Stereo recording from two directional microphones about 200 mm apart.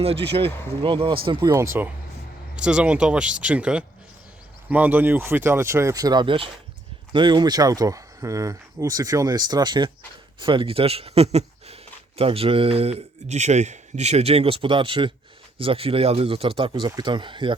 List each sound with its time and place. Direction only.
0.0 s speech: 30° right (ahead or behind)